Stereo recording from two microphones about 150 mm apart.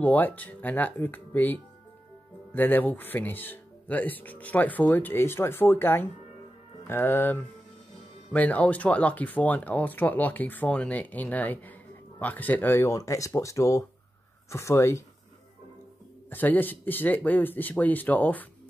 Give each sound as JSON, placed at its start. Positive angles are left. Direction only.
{"t": 0.0, "sound": "speech", "side_deg": 10}
{"t": 16.3, "sound": "speech", "side_deg": 10}